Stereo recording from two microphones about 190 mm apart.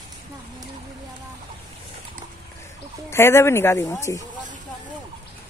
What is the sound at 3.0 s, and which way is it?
Speech, 15° left (ahead or behind).